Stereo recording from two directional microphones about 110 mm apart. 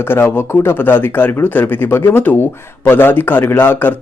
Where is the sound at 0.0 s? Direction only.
20° left (ahead or behind).